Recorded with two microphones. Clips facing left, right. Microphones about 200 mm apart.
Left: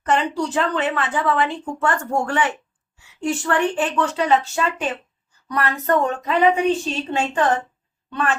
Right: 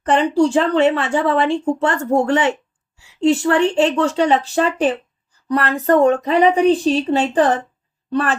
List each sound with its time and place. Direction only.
0.0 s speech: 30° right (ahead or behind)